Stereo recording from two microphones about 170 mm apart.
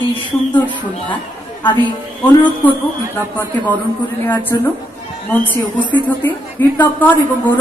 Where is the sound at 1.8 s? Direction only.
10° left (ahead or behind).